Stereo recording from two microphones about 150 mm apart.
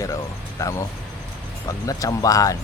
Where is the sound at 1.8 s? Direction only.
25° left (ahead or behind).